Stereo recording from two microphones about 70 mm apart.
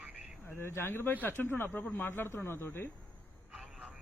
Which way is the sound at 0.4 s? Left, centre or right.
Left.